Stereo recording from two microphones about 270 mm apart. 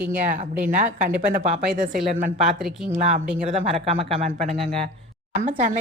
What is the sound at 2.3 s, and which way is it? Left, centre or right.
Speech, centre.